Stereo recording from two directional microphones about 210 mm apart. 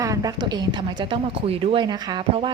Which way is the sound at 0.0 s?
15° right (ahead or behind).